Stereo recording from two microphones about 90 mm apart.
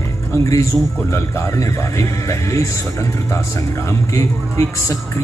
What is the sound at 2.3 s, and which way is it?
Speech, 35° left (ahead or behind).